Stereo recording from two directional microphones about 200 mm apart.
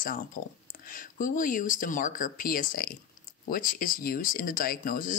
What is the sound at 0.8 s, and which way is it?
Speech, 40° left (ahead or behind).